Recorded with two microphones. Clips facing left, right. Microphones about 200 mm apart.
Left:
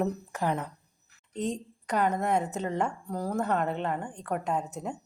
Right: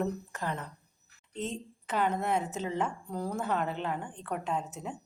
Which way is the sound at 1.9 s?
5° right (ahead or behind).